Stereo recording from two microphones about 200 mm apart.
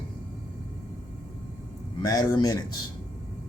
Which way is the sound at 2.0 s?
20° left (ahead or behind).